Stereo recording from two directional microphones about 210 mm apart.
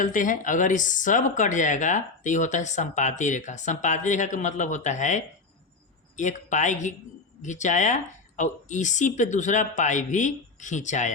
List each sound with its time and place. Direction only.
0.0 s speech: 40° left (ahead or behind)